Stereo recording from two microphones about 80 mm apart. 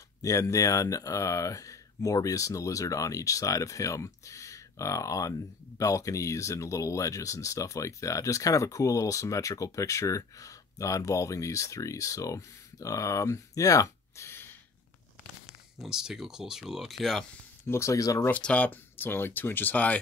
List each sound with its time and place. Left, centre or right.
0.2 s speech: left
15.8 s speech: centre
17.6 s speech: left
18.3 s speech: centre